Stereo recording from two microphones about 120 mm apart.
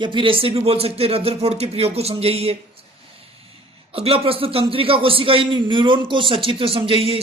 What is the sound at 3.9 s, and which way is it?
A man's voice, 55° right (ahead or behind).